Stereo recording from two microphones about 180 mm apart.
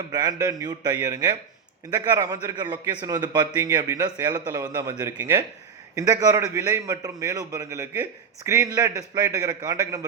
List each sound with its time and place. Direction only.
0.1 s a man's voice: 20° right (ahead or behind)